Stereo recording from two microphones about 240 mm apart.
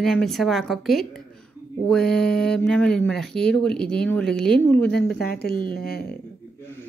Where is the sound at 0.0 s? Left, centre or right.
Centre.